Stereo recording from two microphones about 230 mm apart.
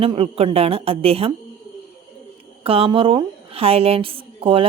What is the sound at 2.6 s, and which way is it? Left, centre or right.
A woman's voice, right.